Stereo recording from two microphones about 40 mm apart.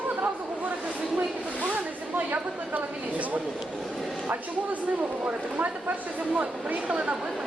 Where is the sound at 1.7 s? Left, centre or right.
Right.